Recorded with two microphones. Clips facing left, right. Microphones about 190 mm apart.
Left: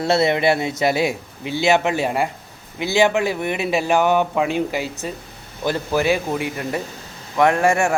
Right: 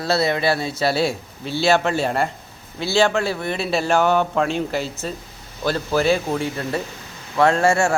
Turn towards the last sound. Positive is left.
turn(degrees=15)  # may be behind; listen again after turning